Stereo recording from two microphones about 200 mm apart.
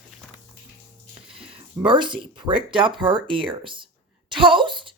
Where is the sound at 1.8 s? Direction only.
25° right (ahead or behind).